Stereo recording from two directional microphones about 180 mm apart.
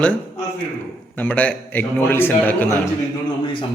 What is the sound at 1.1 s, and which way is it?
A man's voice, 10° left (ahead or behind).